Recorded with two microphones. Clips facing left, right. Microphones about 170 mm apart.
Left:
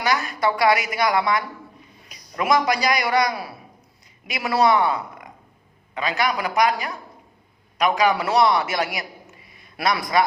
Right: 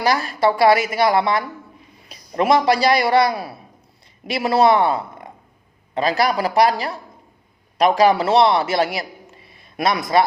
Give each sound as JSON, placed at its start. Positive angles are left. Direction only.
{"t": 0.0, "sound": "a man's voice", "side_deg": -35}